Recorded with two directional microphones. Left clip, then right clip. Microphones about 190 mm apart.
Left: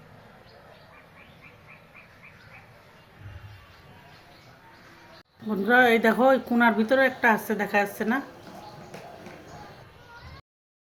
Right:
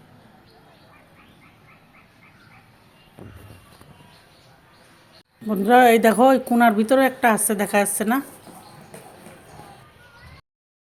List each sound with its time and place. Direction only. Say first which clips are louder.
5.5 s speech: right 6 dB; 40° right (ahead or behind)